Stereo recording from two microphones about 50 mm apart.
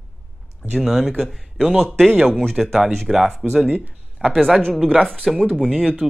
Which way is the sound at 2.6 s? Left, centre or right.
Centre.